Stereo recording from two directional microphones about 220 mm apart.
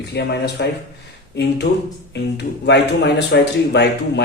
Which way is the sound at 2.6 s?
50° left (ahead or behind).